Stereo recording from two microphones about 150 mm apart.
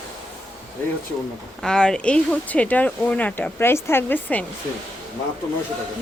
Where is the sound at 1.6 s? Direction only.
5° left (ahead or behind).